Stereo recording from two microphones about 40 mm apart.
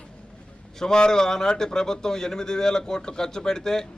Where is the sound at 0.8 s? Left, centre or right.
Centre.